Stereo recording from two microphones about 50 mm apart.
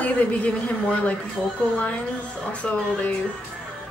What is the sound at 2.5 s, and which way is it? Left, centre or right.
Speech, left.